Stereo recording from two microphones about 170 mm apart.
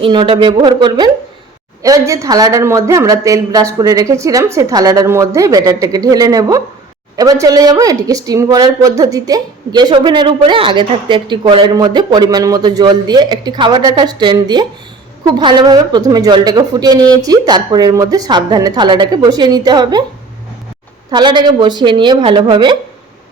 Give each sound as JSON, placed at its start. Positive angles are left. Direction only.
{"t": 0.0, "sound": "a woman's voice", "side_deg": -30}
{"t": 21.1, "sound": "a woman's voice", "side_deg": -25}